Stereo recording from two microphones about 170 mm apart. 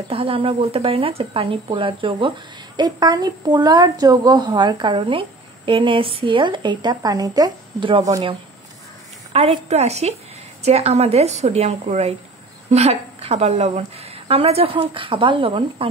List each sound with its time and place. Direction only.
0.1 s speech: 35° right (ahead or behind)
9.3 s a woman's voice: 35° right (ahead or behind)